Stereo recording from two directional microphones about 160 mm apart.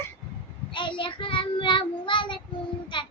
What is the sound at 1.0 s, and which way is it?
Child singing, 30° left (ahead or behind).